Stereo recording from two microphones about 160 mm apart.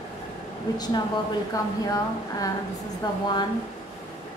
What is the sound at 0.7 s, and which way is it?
A woman's voice, 25° left (ahead or behind).